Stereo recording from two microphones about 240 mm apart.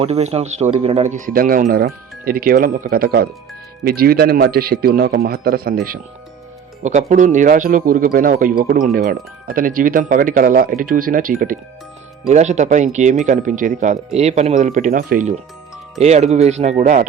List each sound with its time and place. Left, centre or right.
0.0 s a man's voice: right